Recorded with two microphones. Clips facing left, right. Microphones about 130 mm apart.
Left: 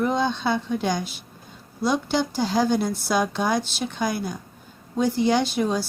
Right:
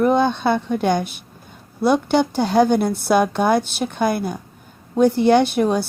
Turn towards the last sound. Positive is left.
turn(degrees=-60)  # may be behind; listen again after turning